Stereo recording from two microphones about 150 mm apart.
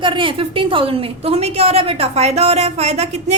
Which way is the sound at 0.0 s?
35° right (ahead or behind).